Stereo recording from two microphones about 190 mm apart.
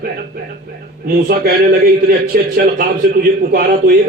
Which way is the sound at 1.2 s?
50° right (ahead or behind).